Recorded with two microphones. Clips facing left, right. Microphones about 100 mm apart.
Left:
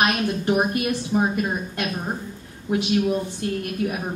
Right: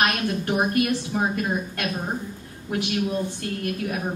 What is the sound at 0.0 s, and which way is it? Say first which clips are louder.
A woman's voice: left 2 dB; 20° left (ahead or behind).